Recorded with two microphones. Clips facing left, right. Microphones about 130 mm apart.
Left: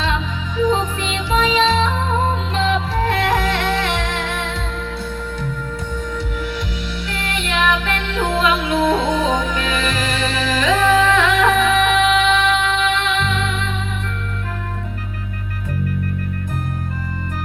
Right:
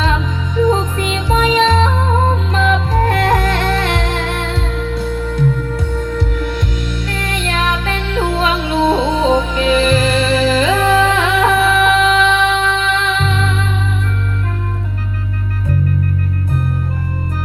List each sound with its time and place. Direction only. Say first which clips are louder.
0.6 s music: right 3 dB; 45° right (ahead or behind)
7.1 s music: right 2 dB; 40° right (ahead or behind)